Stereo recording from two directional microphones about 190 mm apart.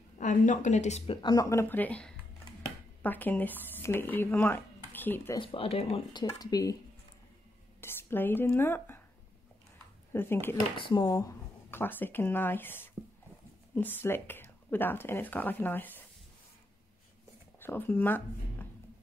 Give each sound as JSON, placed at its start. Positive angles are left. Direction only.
{"t": 0.2, "sound": "speech", "side_deg": 40}
{"t": 5.4, "sound": "speech", "side_deg": 30}
{"t": 6.2, "sound": "speech", "side_deg": 20}
{"t": 7.8, "sound": "speech", "side_deg": 10}
{"t": 10.1, "sound": "speech", "side_deg": 10}
{"t": 10.8, "sound": "speech", "side_deg": 25}
{"t": 17.6, "sound": "speech", "side_deg": 10}